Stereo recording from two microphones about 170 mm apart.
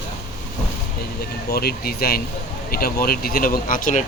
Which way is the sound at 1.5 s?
65° left (ahead or behind).